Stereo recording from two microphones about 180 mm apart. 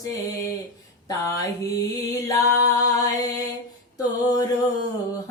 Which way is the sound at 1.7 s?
20° left (ahead or behind).